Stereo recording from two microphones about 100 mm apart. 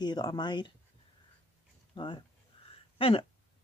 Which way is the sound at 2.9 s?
65° left (ahead or behind).